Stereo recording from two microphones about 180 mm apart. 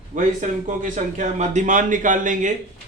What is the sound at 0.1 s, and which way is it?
Speech, 45° right (ahead or behind).